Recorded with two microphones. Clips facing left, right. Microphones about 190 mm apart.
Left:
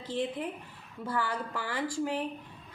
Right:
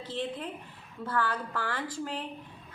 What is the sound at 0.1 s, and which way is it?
Speech, 15° left (ahead or behind).